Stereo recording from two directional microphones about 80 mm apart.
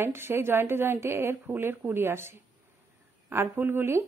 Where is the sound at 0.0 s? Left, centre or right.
Right.